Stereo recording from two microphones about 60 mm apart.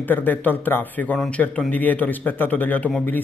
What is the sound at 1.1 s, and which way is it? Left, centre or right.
Speech, centre.